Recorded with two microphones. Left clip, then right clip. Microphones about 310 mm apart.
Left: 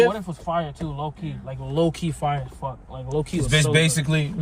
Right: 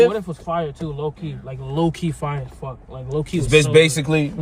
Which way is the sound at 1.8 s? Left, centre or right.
Centre.